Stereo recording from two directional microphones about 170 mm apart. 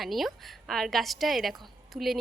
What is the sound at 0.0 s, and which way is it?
A woman's voice, centre (ahead or behind).